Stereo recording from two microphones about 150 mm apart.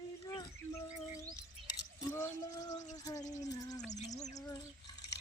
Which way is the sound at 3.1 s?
25° left (ahead or behind).